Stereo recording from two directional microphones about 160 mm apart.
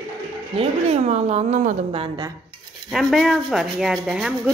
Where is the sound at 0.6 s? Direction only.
40° right (ahead or behind).